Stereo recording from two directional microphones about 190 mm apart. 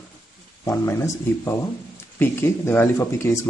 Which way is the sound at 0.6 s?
15° left (ahead or behind).